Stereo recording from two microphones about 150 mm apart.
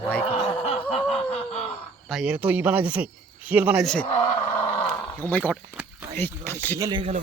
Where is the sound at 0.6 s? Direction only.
40° left (ahead or behind).